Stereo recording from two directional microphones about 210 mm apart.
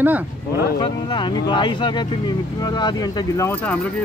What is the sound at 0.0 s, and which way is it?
Speech, 10° right (ahead or behind).